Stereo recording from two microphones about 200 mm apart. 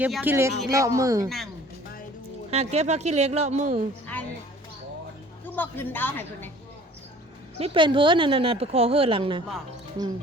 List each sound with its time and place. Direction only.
0.0 s speech: 10° right (ahead or behind)
2.5 s speech: 30° right (ahead or behind)
4.0 s music: 10° left (ahead or behind)
5.5 s a woman's voice: 10° left (ahead or behind)
7.6 s a woman's voice: 25° right (ahead or behind)